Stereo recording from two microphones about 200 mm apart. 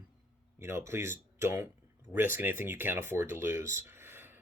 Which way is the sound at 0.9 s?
15° right (ahead or behind).